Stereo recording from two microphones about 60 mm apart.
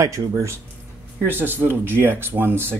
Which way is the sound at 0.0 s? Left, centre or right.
Right.